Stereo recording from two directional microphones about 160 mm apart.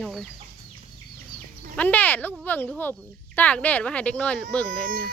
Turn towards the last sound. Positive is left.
turn(degrees=-65)  # may be behind; listen again after turning